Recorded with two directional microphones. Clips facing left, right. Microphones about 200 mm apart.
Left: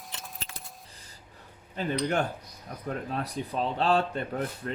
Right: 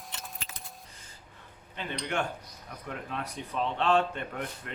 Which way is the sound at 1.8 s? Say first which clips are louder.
Left 5 dB; 40° left (ahead or behind).